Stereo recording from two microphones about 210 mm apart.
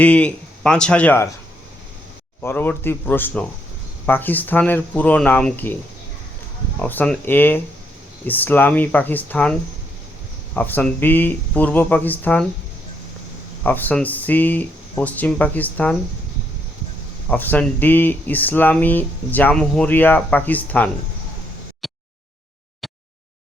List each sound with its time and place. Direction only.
0.0 s speech: 5° left (ahead or behind)
2.4 s speech: 10° left (ahead or behind)
6.7 s speech: 5° left (ahead or behind)
13.7 s speech: 10° left (ahead or behind)
17.2 s speech: 10° left (ahead or behind)
21.8 s a sound: centre (ahead or behind)